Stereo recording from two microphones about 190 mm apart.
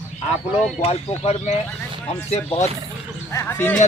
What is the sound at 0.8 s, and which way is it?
Speech, 30° left (ahead or behind).